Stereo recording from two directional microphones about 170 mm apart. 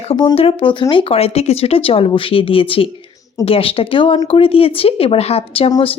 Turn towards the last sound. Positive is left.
turn(degrees=35)  # may be behind; listen again after turning